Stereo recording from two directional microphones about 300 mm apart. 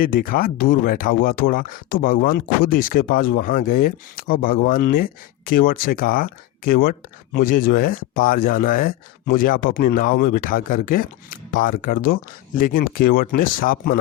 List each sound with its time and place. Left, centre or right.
0.0 s speech: left